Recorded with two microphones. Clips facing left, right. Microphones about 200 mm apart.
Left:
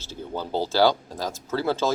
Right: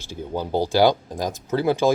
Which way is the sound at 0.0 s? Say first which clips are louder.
Right 4 dB; 15° right (ahead or behind).